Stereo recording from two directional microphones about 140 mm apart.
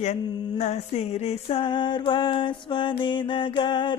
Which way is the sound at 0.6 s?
50° left (ahead or behind).